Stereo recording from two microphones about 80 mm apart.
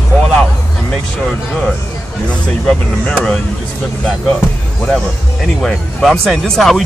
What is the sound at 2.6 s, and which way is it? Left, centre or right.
Speech, centre.